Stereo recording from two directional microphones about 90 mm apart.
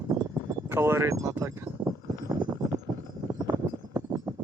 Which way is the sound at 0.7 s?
30° right (ahead or behind).